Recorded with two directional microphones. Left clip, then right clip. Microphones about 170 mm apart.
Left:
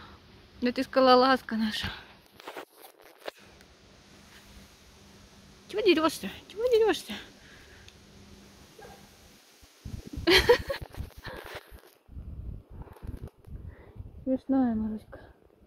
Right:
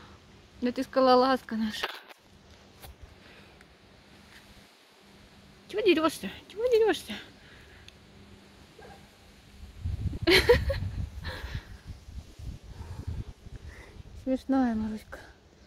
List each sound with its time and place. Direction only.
0.6 s speech: centre (ahead or behind)
5.7 s speech: centre (ahead or behind)
10.2 s a sound: centre (ahead or behind)
14.5 s speech: 30° right (ahead or behind)